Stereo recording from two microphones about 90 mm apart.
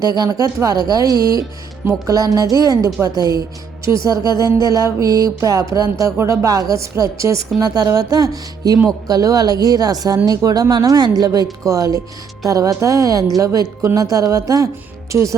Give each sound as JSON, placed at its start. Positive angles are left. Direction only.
{"t": 0.2, "sound": "speech", "side_deg": -40}
{"t": 2.6, "sound": "music", "side_deg": -40}
{"t": 7.6, "sound": "speech", "side_deg": -45}
{"t": 11.6, "sound": "music", "side_deg": -40}